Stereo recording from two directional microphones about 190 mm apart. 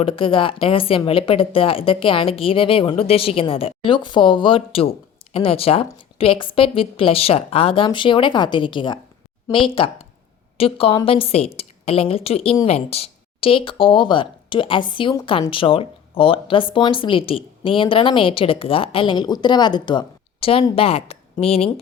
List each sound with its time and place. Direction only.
0.0 s a woman's voice: 30° left (ahead or behind)